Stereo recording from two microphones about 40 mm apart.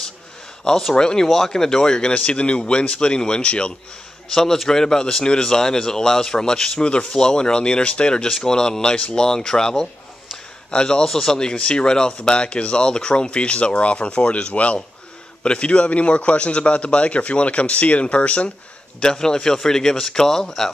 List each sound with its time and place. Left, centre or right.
0.9 s speech: centre
4.3 s a man's voice: centre; by 18.5 s left
18.9 s speech: centre